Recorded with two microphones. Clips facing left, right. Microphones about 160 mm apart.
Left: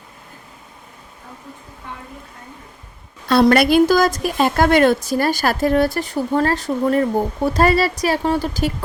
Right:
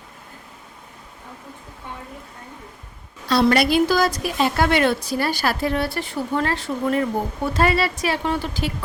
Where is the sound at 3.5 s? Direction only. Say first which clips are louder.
Left 5 dB; 50° left (ahead or behind).